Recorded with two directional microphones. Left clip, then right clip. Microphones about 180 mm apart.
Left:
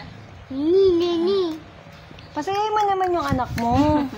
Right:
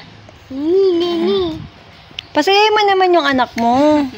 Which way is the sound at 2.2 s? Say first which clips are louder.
Right 12 dB; 45° right (ahead or behind).